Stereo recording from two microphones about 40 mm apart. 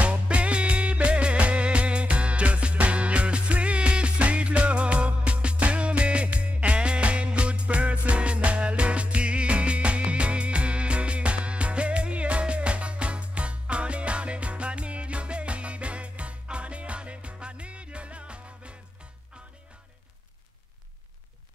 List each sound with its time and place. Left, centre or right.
0.0 s music: right